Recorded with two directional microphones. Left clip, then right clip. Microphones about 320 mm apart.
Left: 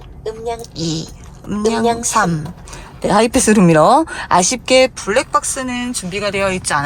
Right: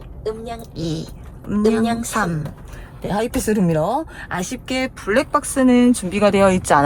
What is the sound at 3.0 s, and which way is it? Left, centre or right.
Speech, left.